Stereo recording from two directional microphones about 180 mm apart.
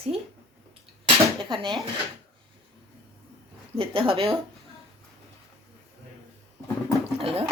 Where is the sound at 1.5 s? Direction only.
25° right (ahead or behind).